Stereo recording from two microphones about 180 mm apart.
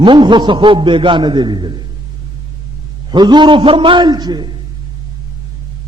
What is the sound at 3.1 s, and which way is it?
A man's voice, 25° right (ahead or behind).